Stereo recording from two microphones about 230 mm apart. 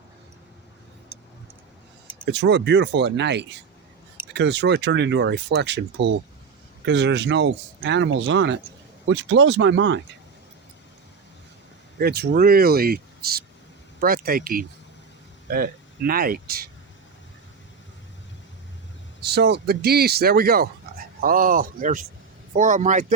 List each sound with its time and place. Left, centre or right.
2.2 s speech: right
11.9 s speech: right
19.2 s speech: right